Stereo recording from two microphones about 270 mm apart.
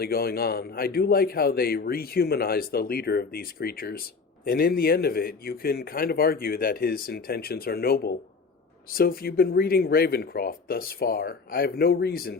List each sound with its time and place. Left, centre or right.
0.0 s a man's voice: left